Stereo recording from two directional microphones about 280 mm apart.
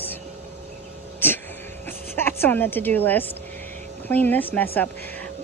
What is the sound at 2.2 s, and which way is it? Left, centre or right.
Speech, centre.